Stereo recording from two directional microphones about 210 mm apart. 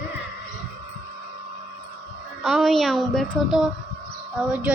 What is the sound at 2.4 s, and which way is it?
A woman's voice, centre (ahead or behind).